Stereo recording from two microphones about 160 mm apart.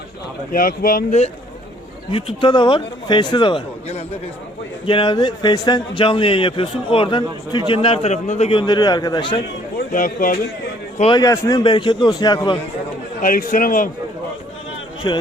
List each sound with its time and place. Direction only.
0.5 s a man's voice: 60° left (ahead or behind)
2.0 s a man's voice: 30° left (ahead or behind)
9.7 s speech: 60° left (ahead or behind)
11.1 s a man's voice: 25° left (ahead or behind)
13.2 s a man's voice: 60° left (ahead or behind)
15.1 s a man's voice: 25° left (ahead or behind)